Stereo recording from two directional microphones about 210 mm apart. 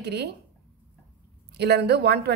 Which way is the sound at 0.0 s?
50° right (ahead or behind).